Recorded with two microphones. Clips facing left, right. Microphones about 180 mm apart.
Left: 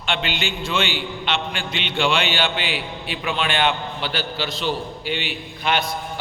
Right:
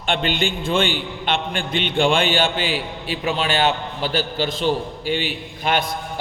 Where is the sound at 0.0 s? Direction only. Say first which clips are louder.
Right 4 dB; 50° right (ahead or behind).